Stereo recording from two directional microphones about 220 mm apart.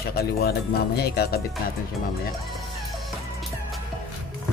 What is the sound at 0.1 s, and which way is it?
Speech, 45° left (ahead or behind).